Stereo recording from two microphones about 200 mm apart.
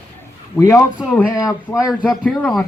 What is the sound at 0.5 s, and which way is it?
Speech, 15° left (ahead or behind).